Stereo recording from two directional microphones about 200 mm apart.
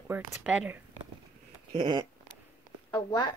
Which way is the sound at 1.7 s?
20° right (ahead or behind).